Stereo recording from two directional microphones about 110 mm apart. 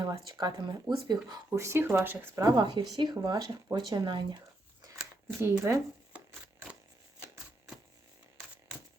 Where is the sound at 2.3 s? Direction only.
35° right (ahead or behind).